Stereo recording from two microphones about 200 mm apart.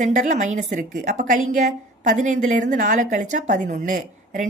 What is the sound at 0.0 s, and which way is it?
A woman's voice, 40° right (ahead or behind).